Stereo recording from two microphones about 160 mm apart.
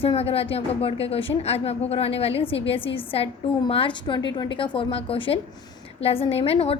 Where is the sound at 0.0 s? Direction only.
35° left (ahead or behind).